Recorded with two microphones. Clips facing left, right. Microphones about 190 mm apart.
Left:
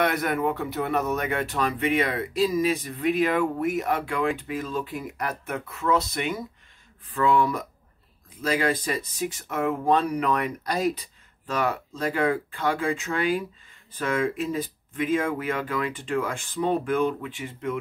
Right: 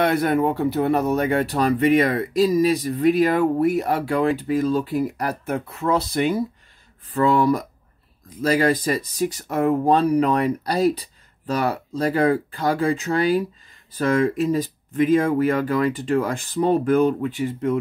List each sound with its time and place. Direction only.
0.0 s speech: 30° right (ahead or behind)